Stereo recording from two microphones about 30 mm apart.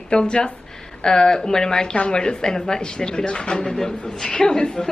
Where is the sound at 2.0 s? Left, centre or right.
Left.